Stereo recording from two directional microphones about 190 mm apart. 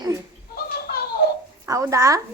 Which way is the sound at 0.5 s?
55° left (ahead or behind).